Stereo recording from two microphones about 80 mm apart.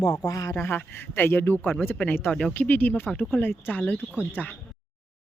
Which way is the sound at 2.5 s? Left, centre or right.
Left.